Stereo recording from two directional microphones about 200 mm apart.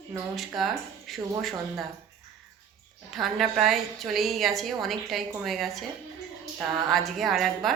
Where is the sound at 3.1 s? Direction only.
Centre (ahead or behind).